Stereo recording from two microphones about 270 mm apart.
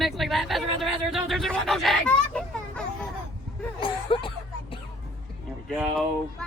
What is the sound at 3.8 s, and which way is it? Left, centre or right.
Speech, centre.